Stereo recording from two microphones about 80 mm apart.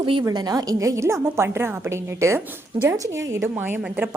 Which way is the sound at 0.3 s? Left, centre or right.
Right.